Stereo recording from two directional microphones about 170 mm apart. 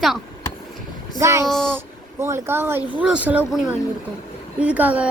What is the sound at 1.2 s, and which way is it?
A child's voice, 15° right (ahead or behind).